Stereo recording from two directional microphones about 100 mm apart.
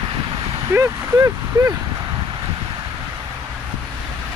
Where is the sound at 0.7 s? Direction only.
30° right (ahead or behind).